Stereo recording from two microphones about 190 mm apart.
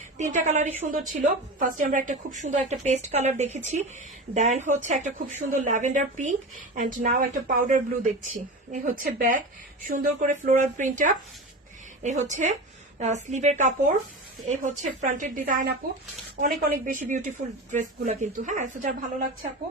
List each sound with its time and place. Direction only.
0.2 s a woman's voice: 40° right (ahead or behind)